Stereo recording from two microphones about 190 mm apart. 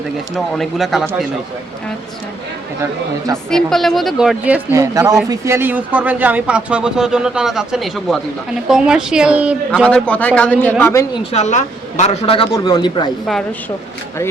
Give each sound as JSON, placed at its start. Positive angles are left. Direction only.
{"t": 0.3, "sound": "speech", "side_deg": 0}
{"t": 3.5, "sound": "speech", "side_deg": 0}
{"t": 9.8, "sound": "a man's voice", "side_deg": 5}
{"t": 11.1, "sound": "a man's voice", "side_deg": 35}